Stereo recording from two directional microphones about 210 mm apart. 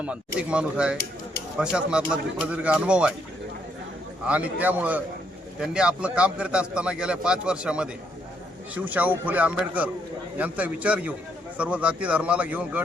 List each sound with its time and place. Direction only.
0.0 s a man's voice: 5° right (ahead or behind)
4.3 s a man's voice: 5° right (ahead or behind)